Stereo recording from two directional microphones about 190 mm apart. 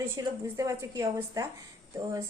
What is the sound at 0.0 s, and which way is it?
A woman's voice, 15° right (ahead or behind).